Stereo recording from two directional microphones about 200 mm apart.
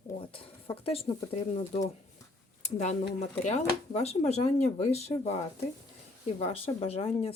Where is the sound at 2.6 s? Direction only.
35° left (ahead or behind).